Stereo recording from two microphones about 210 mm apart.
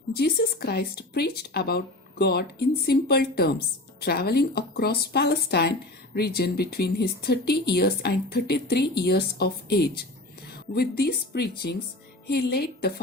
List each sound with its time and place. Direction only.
0.1 s speech: 50° left (ahead or behind)